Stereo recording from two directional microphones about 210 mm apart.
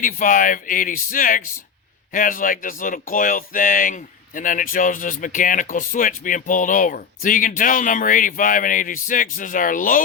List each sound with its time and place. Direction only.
0.0 s speech: 40° left (ahead or behind)